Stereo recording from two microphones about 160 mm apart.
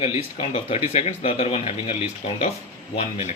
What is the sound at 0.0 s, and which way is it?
A man's voice, 35° left (ahead or behind).